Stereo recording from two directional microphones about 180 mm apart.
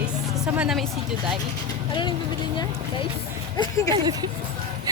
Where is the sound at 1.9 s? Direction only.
25° left (ahead or behind).